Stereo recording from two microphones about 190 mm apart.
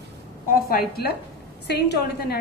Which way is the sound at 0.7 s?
55° left (ahead or behind).